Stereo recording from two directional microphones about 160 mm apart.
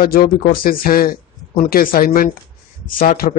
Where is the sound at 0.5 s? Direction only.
65° left (ahead or behind).